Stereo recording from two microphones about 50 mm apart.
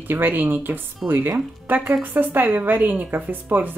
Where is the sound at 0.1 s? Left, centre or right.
Right.